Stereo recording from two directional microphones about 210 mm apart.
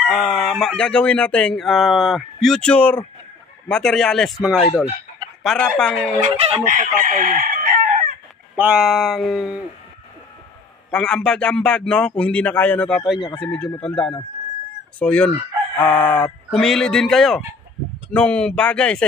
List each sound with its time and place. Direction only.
0.1 s speech: centre (ahead or behind)
6.3 s chicken: 35° right (ahead or behind)
8.5 s speech: 5° right (ahead or behind)
10.9 s speech: 5° left (ahead or behind)